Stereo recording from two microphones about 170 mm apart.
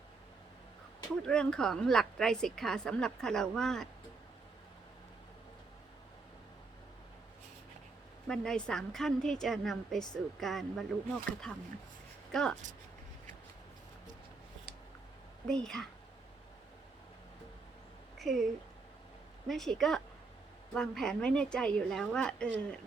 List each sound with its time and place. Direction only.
1.2 s a woman's voice: 5° left (ahead or behind)
8.3 s a woman's voice: 5° left (ahead or behind)
15.4 s a woman's voice: 5° left (ahead or behind)
18.2 s speech: centre (ahead or behind)
19.5 s a woman's voice: centre (ahead or behind)